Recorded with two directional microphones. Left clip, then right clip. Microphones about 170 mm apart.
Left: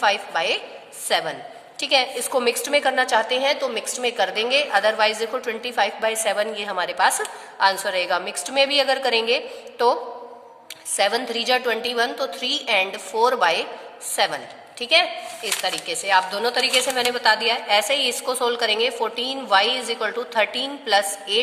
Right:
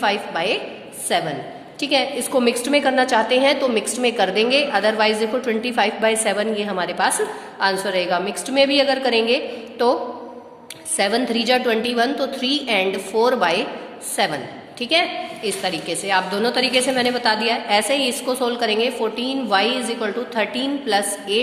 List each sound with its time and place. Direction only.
0.0 s a woman's voice: 40° left (ahead or behind)